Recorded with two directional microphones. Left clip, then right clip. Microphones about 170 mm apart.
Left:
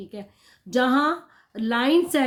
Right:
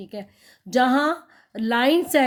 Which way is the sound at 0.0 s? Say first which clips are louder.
Right 3 dB; 45° right (ahead or behind).